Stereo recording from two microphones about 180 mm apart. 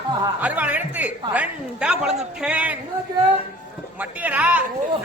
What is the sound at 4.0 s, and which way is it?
Speech, 10° right (ahead or behind).